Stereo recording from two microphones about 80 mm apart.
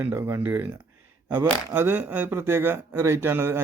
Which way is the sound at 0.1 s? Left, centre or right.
Right.